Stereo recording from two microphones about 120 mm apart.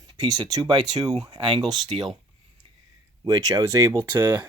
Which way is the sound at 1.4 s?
50° right (ahead or behind).